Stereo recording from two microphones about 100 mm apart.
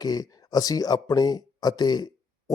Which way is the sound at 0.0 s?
40° left (ahead or behind).